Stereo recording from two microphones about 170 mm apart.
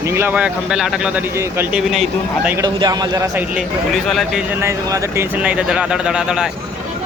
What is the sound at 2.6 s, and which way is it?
Speech, 25° right (ahead or behind).